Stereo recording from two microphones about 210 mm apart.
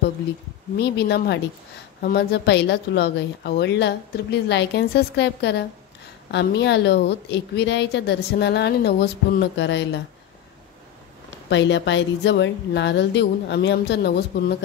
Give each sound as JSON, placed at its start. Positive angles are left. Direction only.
{"t": 0.7, "sound": "a woman's voice", "side_deg": 50}
{"t": 11.4, "sound": "a woman's voice", "side_deg": 60}